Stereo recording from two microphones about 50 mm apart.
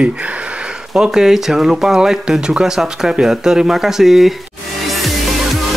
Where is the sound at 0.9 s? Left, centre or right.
Centre.